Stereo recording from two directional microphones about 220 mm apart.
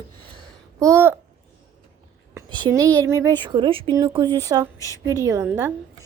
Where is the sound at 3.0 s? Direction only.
15° right (ahead or behind).